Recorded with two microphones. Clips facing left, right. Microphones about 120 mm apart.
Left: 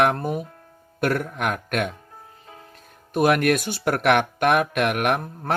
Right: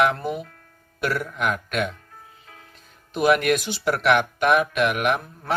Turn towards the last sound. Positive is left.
turn(degrees=55)  # may be behind; listen again after turning